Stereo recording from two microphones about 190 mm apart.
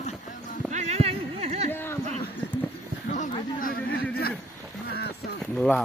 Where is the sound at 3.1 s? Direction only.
45° left (ahead or behind).